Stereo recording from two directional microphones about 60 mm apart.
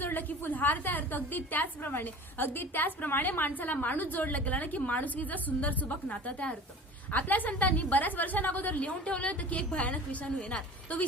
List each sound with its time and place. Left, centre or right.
0.0 s a woman's voice: left